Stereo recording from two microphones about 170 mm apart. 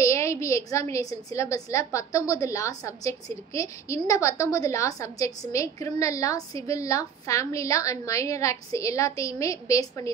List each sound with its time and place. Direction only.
0.0 s a woman's voice: 15° left (ahead or behind)